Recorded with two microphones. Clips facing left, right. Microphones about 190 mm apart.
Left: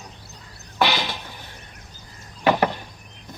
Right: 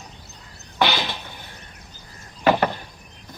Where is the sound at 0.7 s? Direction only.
Centre (ahead or behind).